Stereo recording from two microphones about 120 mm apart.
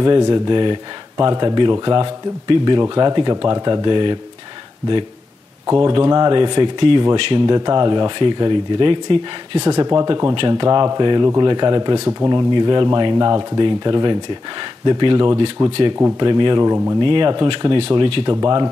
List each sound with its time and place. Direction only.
0.0 s speech: 35° right (ahead or behind)
5.7 s speech: 35° right (ahead or behind)
12.5 s speech: 35° right (ahead or behind)